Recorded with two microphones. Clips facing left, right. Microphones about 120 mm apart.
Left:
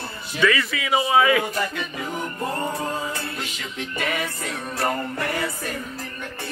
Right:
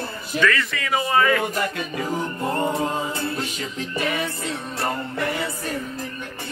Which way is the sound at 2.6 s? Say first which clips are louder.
Right 3 dB; 30° right (ahead or behind).